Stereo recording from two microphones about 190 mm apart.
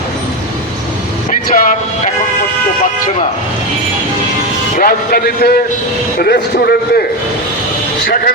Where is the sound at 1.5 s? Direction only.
40° left (ahead or behind).